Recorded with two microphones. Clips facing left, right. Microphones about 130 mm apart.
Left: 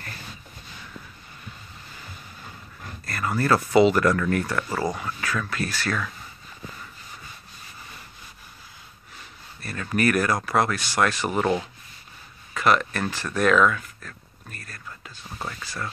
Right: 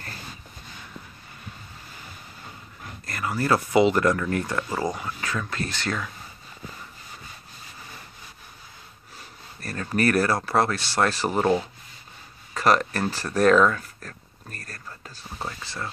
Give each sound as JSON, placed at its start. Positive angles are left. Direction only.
{"t": 3.1, "sound": "speech", "side_deg": -15}
{"t": 9.6, "sound": "a sound", "side_deg": -40}
{"t": 9.8, "sound": "speech", "side_deg": -35}
{"t": 12.5, "sound": "speech", "side_deg": -35}
{"t": 15.3, "sound": "speech", "side_deg": -20}